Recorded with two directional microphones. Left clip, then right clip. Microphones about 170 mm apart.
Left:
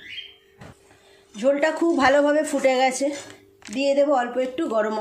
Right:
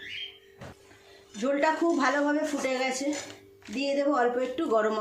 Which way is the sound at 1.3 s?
30° left (ahead or behind).